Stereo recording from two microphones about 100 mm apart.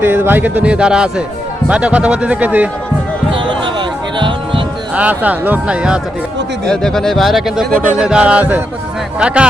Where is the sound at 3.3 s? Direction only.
55° right (ahead or behind).